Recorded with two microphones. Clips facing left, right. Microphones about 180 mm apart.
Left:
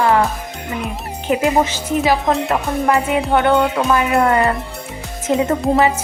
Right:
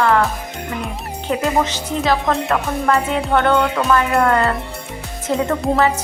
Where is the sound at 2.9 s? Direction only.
5° left (ahead or behind).